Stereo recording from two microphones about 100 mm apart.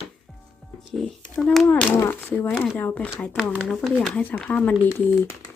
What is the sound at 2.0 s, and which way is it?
Speech, 20° left (ahead or behind).